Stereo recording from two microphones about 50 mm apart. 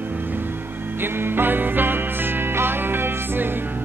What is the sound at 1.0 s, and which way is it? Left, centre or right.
Music, right.